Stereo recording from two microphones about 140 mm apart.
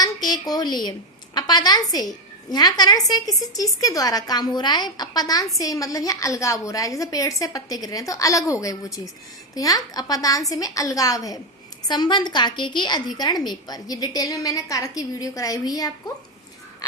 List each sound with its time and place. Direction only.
0.0 s a woman's voice: 30° left (ahead or behind)